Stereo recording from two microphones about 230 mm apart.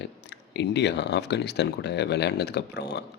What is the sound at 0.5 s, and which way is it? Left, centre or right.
Speech, left.